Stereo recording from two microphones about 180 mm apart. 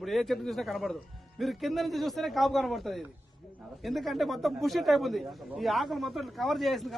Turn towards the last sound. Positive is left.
turn(degrees=0)  # may be behind; listen again after turning